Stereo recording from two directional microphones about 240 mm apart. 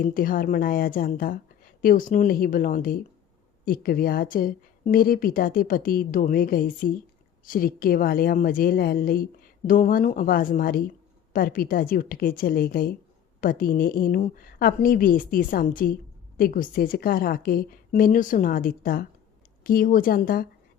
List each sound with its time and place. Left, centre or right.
0.0 s a woman's voice: left